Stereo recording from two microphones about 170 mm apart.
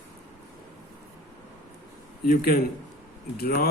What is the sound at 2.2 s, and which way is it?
A man's voice, 65° left (ahead or behind).